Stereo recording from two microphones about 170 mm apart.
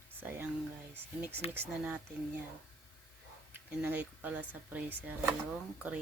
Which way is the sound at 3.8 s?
10° right (ahead or behind).